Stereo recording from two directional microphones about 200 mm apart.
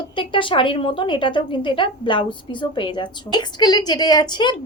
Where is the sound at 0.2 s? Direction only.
25° left (ahead or behind).